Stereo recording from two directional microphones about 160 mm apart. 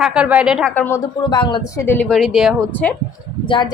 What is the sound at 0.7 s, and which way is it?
Speech, 15° left (ahead or behind).